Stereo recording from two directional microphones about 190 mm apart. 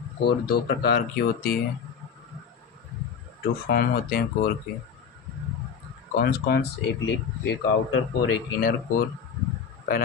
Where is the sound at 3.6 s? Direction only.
50° left (ahead or behind).